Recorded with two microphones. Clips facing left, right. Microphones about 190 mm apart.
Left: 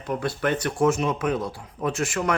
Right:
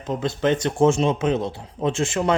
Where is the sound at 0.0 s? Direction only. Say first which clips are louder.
Right 3 dB; 20° right (ahead or behind).